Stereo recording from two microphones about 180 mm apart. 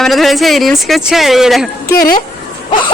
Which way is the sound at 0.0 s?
Centre (ahead or behind).